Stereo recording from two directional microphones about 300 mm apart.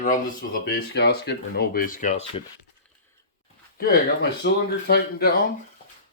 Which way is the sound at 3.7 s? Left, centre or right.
Left.